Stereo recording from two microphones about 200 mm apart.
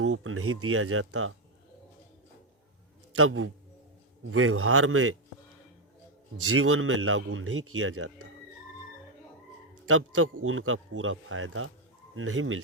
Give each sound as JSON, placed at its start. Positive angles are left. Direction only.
{"t": 0.0, "sound": "speech", "side_deg": -90}
{"t": 3.1, "sound": "a man's voice", "side_deg": -90}
{"t": 6.5, "sound": "speech", "side_deg": -90}
{"t": 9.8, "sound": "speech", "side_deg": -90}